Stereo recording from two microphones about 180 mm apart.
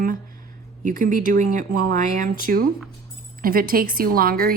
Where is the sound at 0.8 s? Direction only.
50° right (ahead or behind).